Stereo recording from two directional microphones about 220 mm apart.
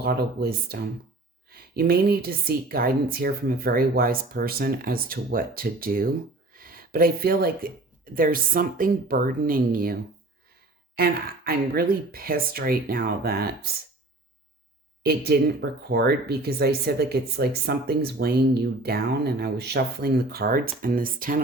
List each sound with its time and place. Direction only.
0.0 s speech: 45° right (ahead or behind)
15.0 s speech: 45° right (ahead or behind)